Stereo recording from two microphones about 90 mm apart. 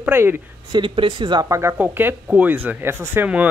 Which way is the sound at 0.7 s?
65° right (ahead or behind).